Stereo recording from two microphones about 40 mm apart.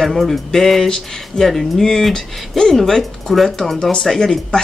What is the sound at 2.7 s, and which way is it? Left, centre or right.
Speech, centre.